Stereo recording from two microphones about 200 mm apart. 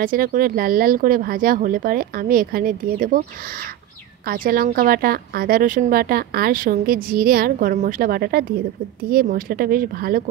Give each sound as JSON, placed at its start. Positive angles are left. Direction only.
{"t": 0.0, "sound": "speech", "side_deg": -45}
{"t": 4.3, "sound": "speech", "side_deg": -45}